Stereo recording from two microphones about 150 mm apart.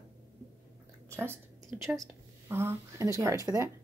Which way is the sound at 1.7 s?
10° right (ahead or behind).